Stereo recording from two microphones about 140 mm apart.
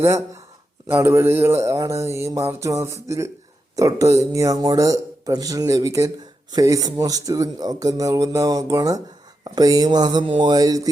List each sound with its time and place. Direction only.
0.9 s mantra: 20° right (ahead or behind)